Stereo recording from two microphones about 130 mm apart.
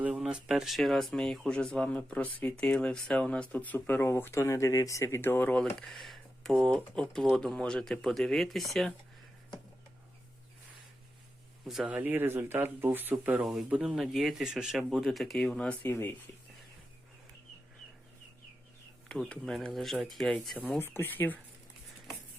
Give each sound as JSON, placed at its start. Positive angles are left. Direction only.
{"t": 0.0, "sound": "speech", "side_deg": -5}
{"t": 11.6, "sound": "speech", "side_deg": 0}
{"t": 11.9, "sound": "speech", "side_deg": -15}
{"t": 13.4, "sound": "speech", "side_deg": 0}
{"t": 15.9, "sound": "speech", "side_deg": 20}
{"t": 19.0, "sound": "speech", "side_deg": 5}
{"t": 20.7, "sound": "speech", "side_deg": 15}